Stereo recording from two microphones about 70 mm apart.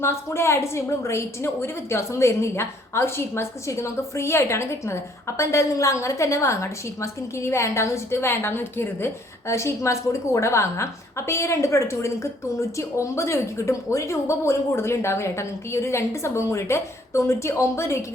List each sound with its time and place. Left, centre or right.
0.0 s a woman's voice: left